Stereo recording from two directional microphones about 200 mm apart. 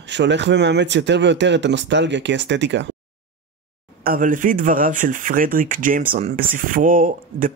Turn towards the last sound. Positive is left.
turn(degrees=-45)  # may be behind; listen again after turning